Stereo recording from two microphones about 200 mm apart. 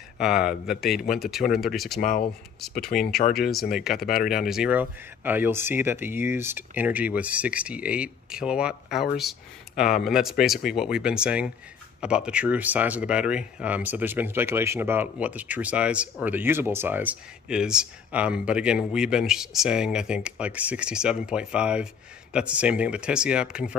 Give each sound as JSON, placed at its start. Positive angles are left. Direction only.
{"t": 0.2, "sound": "speech", "side_deg": 0}
{"t": 2.0, "sound": "speech", "side_deg": 40}
{"t": 3.3, "sound": "speech", "side_deg": 0}